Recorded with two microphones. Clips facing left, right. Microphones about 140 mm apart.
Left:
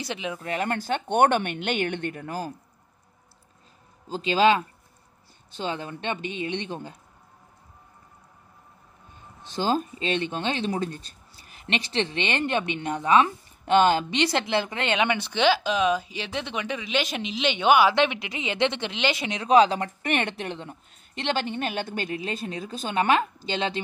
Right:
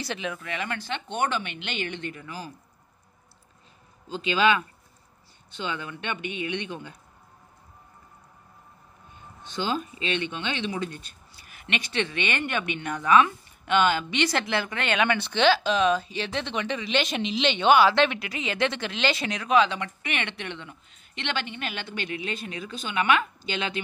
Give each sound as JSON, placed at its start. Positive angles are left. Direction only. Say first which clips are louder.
{"t": 0.0, "sound": "a woman's voice", "louder": "even", "side_deg": 15}
{"t": 0.4, "sound": "speech", "louder": "left 5 dB", "side_deg": 40}
{"t": 4.1, "sound": "speech", "louder": "left 3 dB", "side_deg": 35}
{"t": 9.4, "sound": "speech", "louder": "left 4 dB", "side_deg": 35}
{"t": 14.4, "sound": "a woman's voice", "louder": "left 2 dB", "side_deg": 20}
{"t": 19.4, "sound": "speech", "louder": "left 4 dB", "side_deg": 35}